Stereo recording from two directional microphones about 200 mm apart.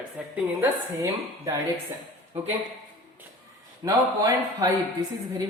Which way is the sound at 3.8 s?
20° right (ahead or behind).